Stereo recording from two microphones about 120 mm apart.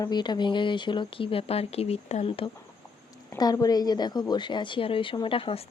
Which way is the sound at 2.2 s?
50° left (ahead or behind).